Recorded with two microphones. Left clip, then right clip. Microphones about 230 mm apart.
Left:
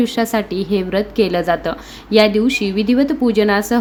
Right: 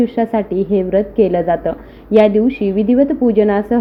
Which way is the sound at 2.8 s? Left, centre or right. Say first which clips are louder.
Right 4 dB; centre.